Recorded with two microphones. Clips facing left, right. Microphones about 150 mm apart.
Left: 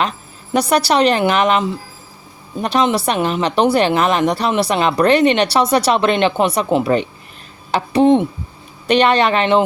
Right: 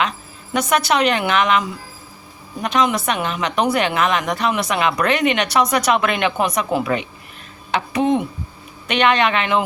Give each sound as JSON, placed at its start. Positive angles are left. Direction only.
{"t": 0.5, "sound": "speech", "side_deg": 35}